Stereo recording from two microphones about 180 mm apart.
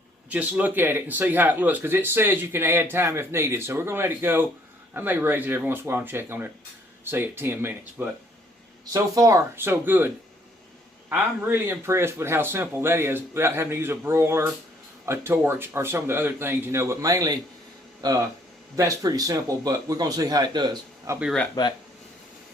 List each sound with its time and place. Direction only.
0.3 s speech: 10° right (ahead or behind)
11.1 s a man's voice: 10° right (ahead or behind)
21.6 s speech: 20° left (ahead or behind)